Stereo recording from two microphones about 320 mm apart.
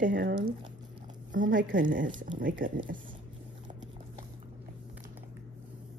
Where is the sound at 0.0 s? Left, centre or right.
Right.